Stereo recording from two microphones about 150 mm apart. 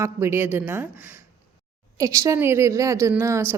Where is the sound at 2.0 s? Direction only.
20° right (ahead or behind).